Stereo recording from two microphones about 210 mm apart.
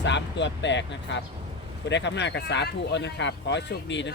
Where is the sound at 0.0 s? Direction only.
55° left (ahead or behind).